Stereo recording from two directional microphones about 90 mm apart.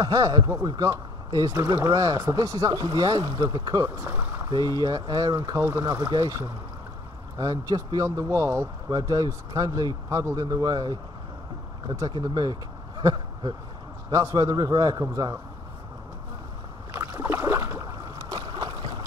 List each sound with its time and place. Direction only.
0.0 s speech: 45° right (ahead or behind)
3.9 s speech: 25° right (ahead or behind)
4.5 s speech: 50° right (ahead or behind)
5.6 s speech: 35° right (ahead or behind)
8.9 s speech: 50° right (ahead or behind)
14.1 s speech: 45° right (ahead or behind)
17.0 s boat: 30° right (ahead or behind)
17.8 s boat: 40° right (ahead or behind)